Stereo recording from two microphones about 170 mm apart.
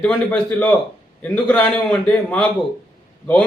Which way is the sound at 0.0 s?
10° left (ahead or behind).